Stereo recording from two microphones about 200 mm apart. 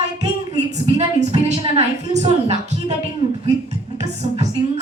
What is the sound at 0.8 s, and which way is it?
A woman's voice, 30° right (ahead or behind).